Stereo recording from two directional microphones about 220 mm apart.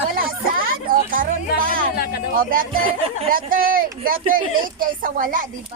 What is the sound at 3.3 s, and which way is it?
Speech, 40° right (ahead or behind).